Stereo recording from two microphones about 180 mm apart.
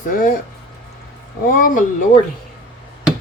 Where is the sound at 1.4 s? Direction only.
50° left (ahead or behind).